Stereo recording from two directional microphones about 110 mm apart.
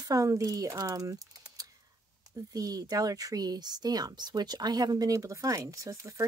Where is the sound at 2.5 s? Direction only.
35° right (ahead or behind).